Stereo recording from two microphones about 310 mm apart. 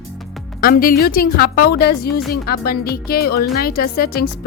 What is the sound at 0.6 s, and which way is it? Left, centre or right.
A woman's voice, left.